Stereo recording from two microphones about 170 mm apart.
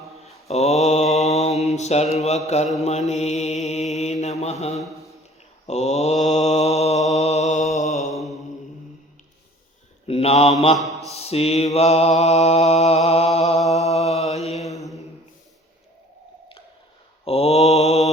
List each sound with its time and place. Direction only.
0.4 s mantra: 40° left (ahead or behind)
10.1 s mantra: 35° left (ahead or behind)
10.8 s mantra: 20° right (ahead or behind)
11.1 s mantra: 35° left (ahead or behind)
17.2 s mantra: 35° left (ahead or behind)